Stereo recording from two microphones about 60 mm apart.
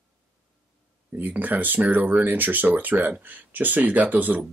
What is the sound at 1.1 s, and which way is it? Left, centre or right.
Speech, right.